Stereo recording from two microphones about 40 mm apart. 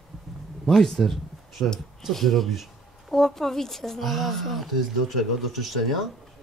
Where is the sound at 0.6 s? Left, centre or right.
Centre.